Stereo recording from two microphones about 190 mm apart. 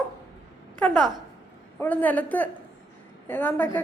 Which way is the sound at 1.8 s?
10° left (ahead or behind).